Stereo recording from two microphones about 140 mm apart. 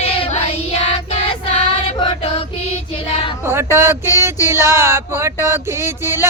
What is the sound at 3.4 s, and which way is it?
Female singing, 15° right (ahead or behind).